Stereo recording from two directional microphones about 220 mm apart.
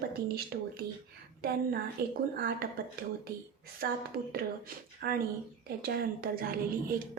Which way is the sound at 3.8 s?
40° right (ahead or behind).